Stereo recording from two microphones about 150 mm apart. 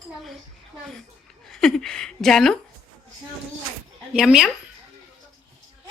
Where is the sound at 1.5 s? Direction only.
5° left (ahead or behind).